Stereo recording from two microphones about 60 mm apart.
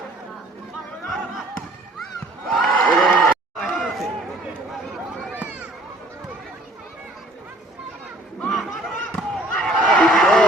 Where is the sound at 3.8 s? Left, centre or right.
Centre.